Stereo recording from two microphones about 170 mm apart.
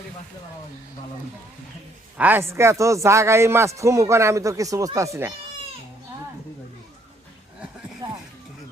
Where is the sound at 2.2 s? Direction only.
10° right (ahead or behind).